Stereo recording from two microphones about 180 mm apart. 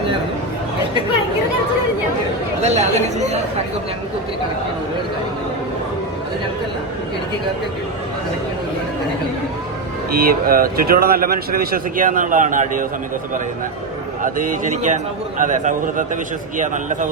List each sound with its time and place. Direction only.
2.6 s speech: 40° right (ahead or behind)
10.2 s speech: 55° right (ahead or behind)
14.2 s speech: 45° right (ahead or behind)